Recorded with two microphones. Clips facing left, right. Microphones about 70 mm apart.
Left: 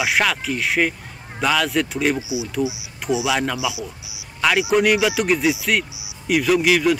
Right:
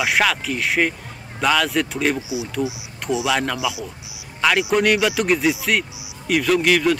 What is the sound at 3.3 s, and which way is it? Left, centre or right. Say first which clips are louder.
Speech: right 2 dB; centre.